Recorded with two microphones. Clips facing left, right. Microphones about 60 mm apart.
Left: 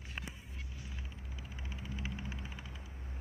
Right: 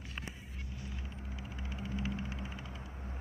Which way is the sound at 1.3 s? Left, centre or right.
Right.